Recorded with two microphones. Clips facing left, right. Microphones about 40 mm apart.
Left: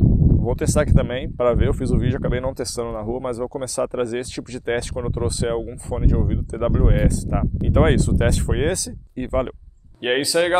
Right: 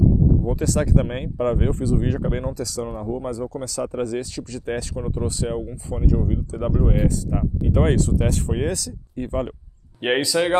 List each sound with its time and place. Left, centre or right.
0.6 s speech: left
1.0 s speech: left
10.0 s speech: centre